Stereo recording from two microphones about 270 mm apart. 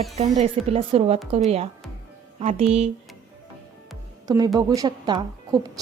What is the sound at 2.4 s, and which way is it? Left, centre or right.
Speech, right.